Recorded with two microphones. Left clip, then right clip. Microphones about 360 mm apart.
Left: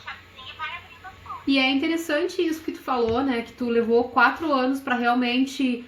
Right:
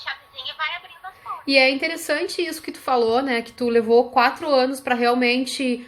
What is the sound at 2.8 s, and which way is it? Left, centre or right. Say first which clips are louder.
Speech: right 4 dB; right.